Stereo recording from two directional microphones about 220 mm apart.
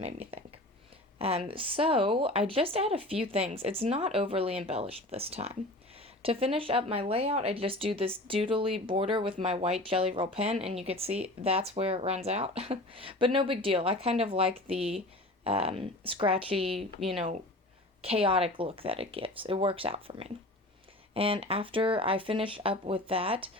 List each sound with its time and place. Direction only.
0.0 s speech: 25° right (ahead or behind)
18.0 s speech: 25° right (ahead or behind)